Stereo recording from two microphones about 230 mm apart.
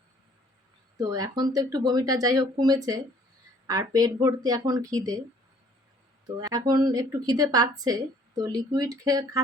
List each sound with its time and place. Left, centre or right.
0.9 s speech: centre
6.4 s speech: centre